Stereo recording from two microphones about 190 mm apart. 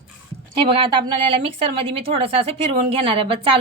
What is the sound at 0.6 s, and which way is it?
A woman's voice, 30° right (ahead or behind).